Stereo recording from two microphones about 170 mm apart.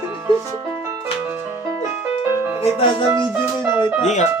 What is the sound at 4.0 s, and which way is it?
Speech, 40° left (ahead or behind).